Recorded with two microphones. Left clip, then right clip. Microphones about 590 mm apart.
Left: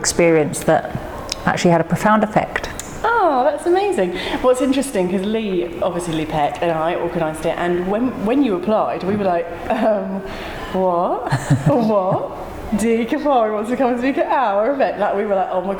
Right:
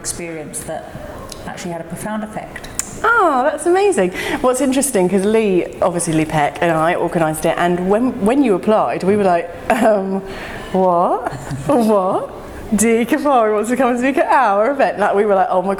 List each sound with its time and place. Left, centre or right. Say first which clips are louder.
0.0 s a woman's voice: left 13 dB; left
3.0 s a woman's voice: right 2 dB; right